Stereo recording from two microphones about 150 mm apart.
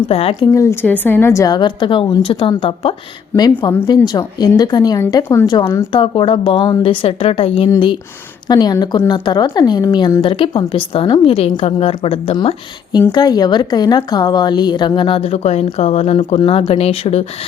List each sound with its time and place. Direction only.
0.1 s a woman's voice: 40° left (ahead or behind)
0.5 s a woman's voice: 20° left (ahead or behind)
5.5 s a woman's voice: 30° left (ahead or behind)